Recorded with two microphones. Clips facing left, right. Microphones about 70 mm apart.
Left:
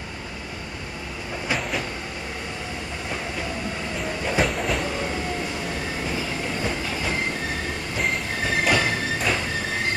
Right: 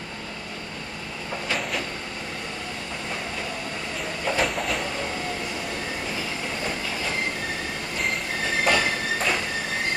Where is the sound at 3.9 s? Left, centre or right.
Centre.